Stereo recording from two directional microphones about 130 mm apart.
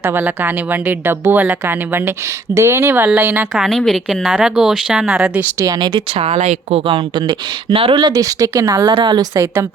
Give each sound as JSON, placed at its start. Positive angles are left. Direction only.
{"t": 0.0, "sound": "speech", "side_deg": -15}
{"t": 3.5, "sound": "speech", "side_deg": 0}
{"t": 5.5, "sound": "a woman's voice", "side_deg": -30}
{"t": 6.1, "sound": "a woman's voice", "side_deg": -55}
{"t": 8.0, "sound": "a woman's voice", "side_deg": -30}